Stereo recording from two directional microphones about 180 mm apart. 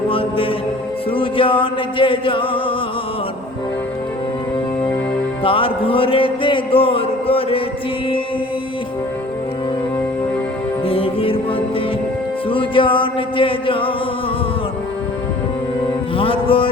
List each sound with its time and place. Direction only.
0.1 s music: 30° left (ahead or behind)
5.4 s music: 30° left (ahead or behind)
10.8 s music: 30° left (ahead or behind)
12.5 s music: 30° left (ahead or behind)
16.1 s music: 30° left (ahead or behind)